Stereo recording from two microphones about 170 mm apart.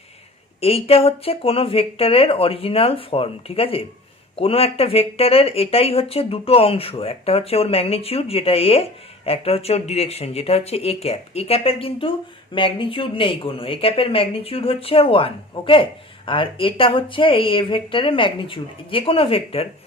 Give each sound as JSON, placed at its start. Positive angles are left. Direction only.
{"t": 0.6, "sound": "speech", "side_deg": 35}